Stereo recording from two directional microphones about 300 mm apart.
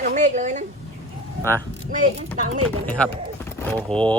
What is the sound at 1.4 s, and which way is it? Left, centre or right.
Speech, centre.